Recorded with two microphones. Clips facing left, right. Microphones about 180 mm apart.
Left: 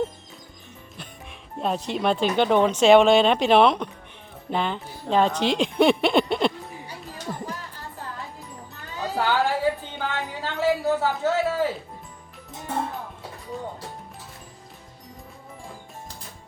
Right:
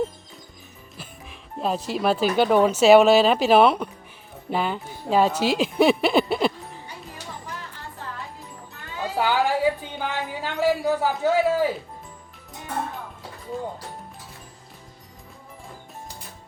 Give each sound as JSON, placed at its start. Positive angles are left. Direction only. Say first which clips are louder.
{"t": 0.9, "sound": "speech", "louder": "right 1 dB", "side_deg": 0}
{"t": 9.1, "sound": "a sound", "louder": "right 1 dB", "side_deg": -15}
{"t": 13.5, "sound": "speech", "louder": "right 3 dB", "side_deg": 0}